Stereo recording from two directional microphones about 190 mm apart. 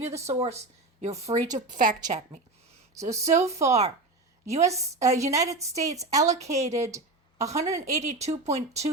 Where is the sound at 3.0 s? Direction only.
15° right (ahead or behind).